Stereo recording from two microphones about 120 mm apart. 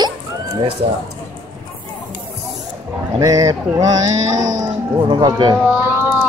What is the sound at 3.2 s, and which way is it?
Speech, 30° right (ahead or behind).